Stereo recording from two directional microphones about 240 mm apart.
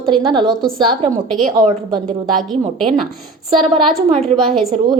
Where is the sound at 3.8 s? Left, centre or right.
Right.